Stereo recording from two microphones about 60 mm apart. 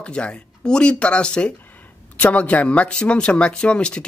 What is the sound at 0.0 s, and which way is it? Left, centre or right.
Speech, centre.